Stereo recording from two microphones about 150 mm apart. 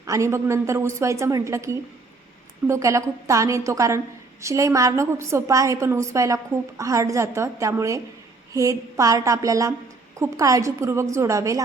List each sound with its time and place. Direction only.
0.0 s a woman's voice: 20° right (ahead or behind)